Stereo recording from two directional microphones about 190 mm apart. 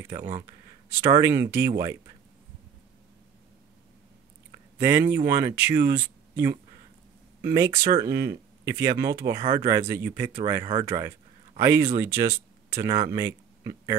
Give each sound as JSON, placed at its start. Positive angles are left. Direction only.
{"t": 1.1, "sound": "speech", "side_deg": -15}
{"t": 4.7, "sound": "speech", "side_deg": -10}
{"t": 12.4, "sound": "a sound", "side_deg": -15}
{"t": 12.9, "sound": "speech", "side_deg": -20}